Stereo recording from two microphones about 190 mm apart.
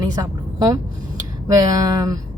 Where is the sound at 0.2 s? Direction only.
20° right (ahead or behind).